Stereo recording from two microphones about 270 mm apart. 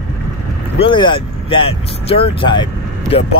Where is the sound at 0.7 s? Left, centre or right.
Centre.